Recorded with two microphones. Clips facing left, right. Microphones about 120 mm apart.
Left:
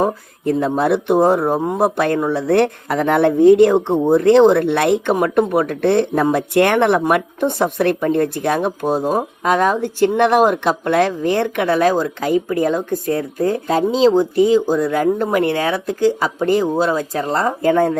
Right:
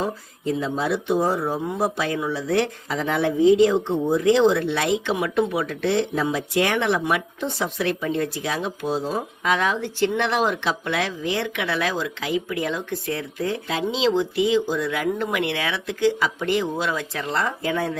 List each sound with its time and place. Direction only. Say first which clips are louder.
0.0 s speech: left 8 dB; 55° left (ahead or behind)